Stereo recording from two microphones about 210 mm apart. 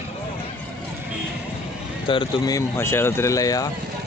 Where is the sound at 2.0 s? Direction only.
25° left (ahead or behind).